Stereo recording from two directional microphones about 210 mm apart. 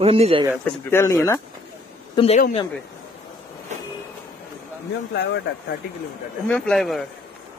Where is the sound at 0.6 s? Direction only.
10° left (ahead or behind).